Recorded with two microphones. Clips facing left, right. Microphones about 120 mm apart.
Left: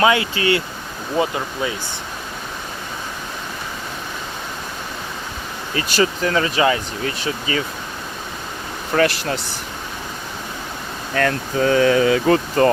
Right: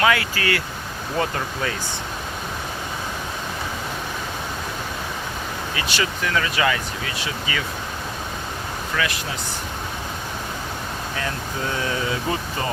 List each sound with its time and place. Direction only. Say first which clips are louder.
0.0 s speech: left 4 dB; 25° left (ahead or behind)
5.7 s speech: left 8 dB; 35° left (ahead or behind)
8.9 s speech: left 9 dB; 45° left (ahead or behind)
11.1 s speech: left 12 dB; 70° left (ahead or behind)